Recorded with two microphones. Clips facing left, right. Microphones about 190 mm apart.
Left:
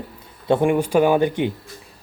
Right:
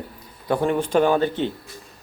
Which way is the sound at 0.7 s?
10° left (ahead or behind).